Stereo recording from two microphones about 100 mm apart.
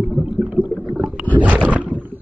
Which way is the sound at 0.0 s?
10° right (ahead or behind).